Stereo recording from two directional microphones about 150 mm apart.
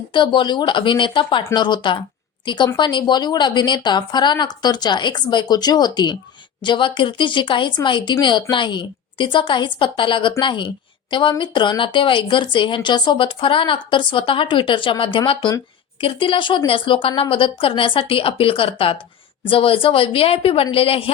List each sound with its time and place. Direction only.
0.1 s a woman's voice: 30° left (ahead or behind)